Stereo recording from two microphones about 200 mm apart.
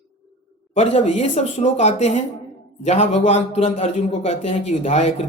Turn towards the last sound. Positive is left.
turn(degrees=35)  # may be behind; listen again after turning